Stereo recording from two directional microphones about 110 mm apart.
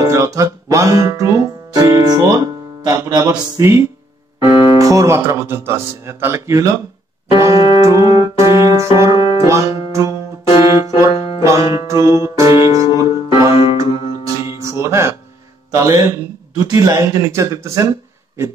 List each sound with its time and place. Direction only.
0.0 s music: 30° right (ahead or behind)
4.4 s speech: 30° right (ahead or behind)
7.3 s music: 30° right (ahead or behind)
13.8 s music: 70° left (ahead or behind)
14.6 s music: 25° right (ahead or behind)
15.7 s a sound: 30° right (ahead or behind)
16.6 s speech: 30° right (ahead or behind)